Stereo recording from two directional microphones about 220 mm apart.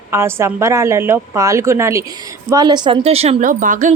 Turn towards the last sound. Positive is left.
turn(degrees=-35)  # may be behind; listen again after turning